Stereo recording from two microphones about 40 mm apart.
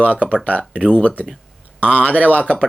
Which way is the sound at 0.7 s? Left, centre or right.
Right.